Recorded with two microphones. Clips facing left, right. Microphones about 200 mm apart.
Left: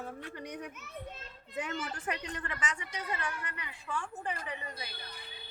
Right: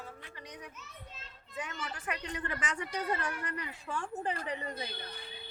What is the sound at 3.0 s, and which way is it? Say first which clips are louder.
A woman's voice: right 4 dB; 35° right (ahead or behind).